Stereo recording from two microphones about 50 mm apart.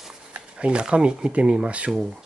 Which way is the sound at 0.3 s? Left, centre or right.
Right.